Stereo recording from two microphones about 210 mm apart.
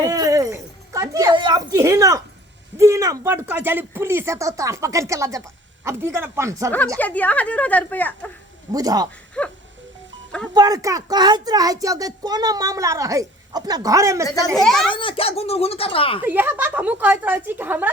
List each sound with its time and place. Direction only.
0.0 s a sound: 15° right (ahead or behind)
2.7 s a child's voice: 15° right (ahead or behind)
7.0 s a woman's voice: 5° left (ahead or behind)
8.7 s a child's voice: 15° right (ahead or behind)
9.4 s speech: 5° left (ahead or behind)
10.5 s a child's voice: 20° right (ahead or behind)
14.5 s speech: centre (ahead or behind)
14.8 s speech: 25° left (ahead or behind)
16.2 s a child's voice: 10° right (ahead or behind)